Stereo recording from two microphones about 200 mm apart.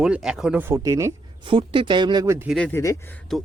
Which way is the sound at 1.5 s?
25° right (ahead or behind).